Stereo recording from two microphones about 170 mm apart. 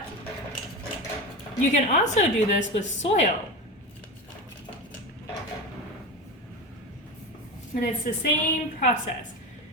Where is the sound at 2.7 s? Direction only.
45° left (ahead or behind).